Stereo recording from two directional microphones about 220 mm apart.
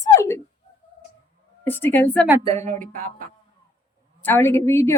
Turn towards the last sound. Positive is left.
turn(degrees=10)  # may be behind; listen again after turning